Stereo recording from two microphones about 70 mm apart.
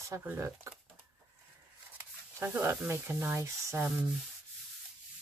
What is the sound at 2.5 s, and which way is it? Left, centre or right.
Speech, right.